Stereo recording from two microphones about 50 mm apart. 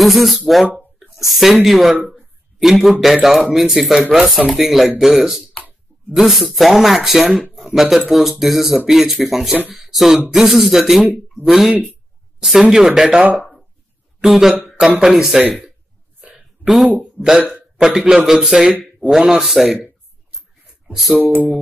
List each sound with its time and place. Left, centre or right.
0.0 s a man's voice: centre
13.2 s speech: right
14.2 s a man's voice: centre
16.6 s speech: centre
17.4 s speech: right
17.7 s a man's voice: centre
20.9 s speech: centre